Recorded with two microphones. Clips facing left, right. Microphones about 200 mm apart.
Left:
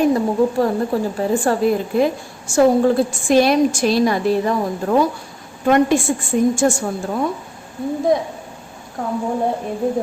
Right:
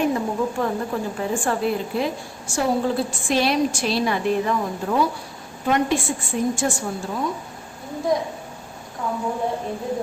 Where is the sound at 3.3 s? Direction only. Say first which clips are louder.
Left 7 dB; 45° left (ahead or behind).